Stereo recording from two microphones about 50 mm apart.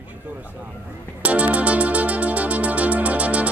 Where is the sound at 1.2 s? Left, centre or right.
Right.